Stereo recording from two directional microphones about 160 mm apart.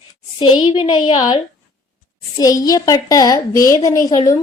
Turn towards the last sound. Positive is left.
turn(degrees=25)  # may be behind; listen again after turning